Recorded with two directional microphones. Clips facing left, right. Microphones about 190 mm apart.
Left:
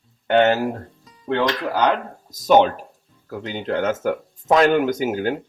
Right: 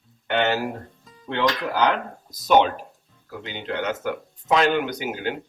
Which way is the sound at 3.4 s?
45° left (ahead or behind).